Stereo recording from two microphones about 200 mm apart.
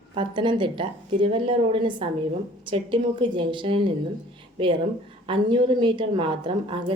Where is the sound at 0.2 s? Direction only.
25° right (ahead or behind).